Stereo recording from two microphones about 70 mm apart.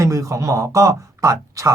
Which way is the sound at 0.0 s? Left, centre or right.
Right.